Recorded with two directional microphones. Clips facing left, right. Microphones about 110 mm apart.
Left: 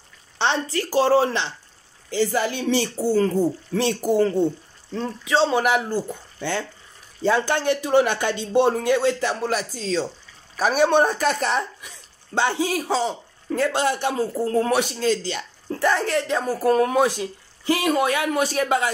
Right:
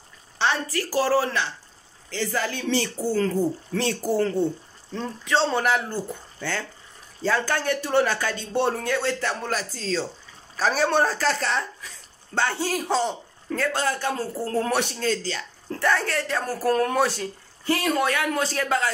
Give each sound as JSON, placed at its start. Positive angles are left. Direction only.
{"t": 0.4, "sound": "a woman's voice", "side_deg": 25}
{"t": 7.2, "sound": "a man's voice", "side_deg": 20}
{"t": 12.7, "sound": "speech", "side_deg": 5}
{"t": 13.6, "sound": "a woman's voice", "side_deg": 20}
{"t": 14.1, "sound": "a man's voice", "side_deg": 5}